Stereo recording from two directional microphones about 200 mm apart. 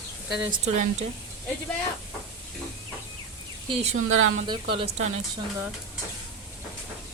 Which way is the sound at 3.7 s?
30° right (ahead or behind).